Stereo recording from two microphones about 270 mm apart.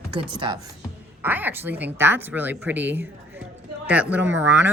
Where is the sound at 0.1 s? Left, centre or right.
Centre.